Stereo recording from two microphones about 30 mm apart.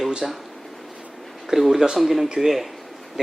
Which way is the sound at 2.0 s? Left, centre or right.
Centre.